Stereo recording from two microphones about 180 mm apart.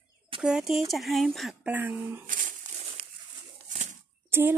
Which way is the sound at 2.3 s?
50° right (ahead or behind).